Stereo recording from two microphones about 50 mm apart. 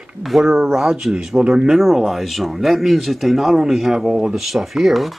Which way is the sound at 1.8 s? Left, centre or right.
Centre.